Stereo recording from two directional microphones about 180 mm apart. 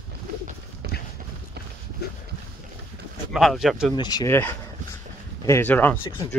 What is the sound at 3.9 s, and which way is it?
Speech, 25° left (ahead or behind).